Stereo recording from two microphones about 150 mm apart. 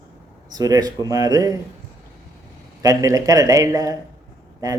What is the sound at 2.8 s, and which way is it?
Speech, 25° right (ahead or behind).